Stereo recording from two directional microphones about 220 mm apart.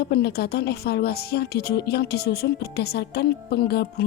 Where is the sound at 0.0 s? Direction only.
45° left (ahead or behind).